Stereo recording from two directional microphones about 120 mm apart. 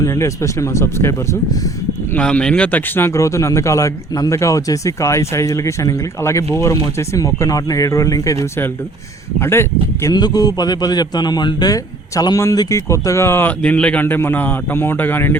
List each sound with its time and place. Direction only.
0.0 s a man's voice: 25° left (ahead or behind)
2.1 s a man's voice: 10° left (ahead or behind); by 8.4 s 30° left (ahead or behind)
9.4 s a man's voice: 20° left (ahead or behind)
10.0 s a man's voice: 35° left (ahead or behind)
13.6 s a man's voice: 10° left (ahead or behind)